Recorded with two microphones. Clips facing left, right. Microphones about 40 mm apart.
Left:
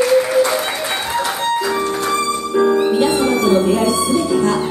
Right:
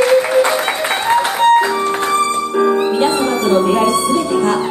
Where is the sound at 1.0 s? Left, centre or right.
Right.